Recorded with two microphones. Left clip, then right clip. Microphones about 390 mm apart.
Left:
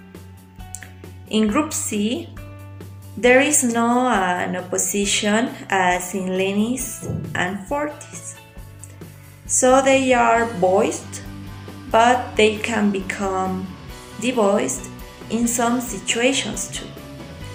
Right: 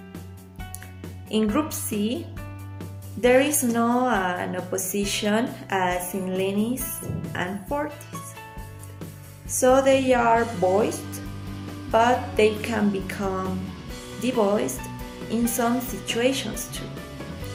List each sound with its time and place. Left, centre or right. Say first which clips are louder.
1.3 s a woman's voice: left 4 dB; right
3.2 s a woman's voice: left 4 dB; right
9.5 s a woman's voice: left 3 dB; right